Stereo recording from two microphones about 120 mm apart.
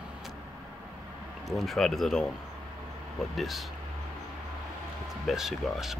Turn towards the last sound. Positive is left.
turn(degrees=-5)  # may be behind; listen again after turning